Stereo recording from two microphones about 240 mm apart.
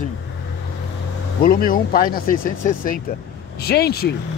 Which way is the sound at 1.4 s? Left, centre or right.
Left.